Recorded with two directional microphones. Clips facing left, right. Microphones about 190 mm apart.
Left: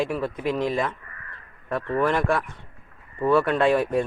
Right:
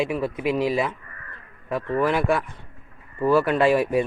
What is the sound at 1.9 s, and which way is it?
Speech, 5° right (ahead or behind).